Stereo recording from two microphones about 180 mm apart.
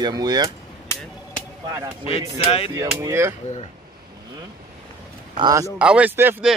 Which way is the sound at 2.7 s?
15° right (ahead or behind).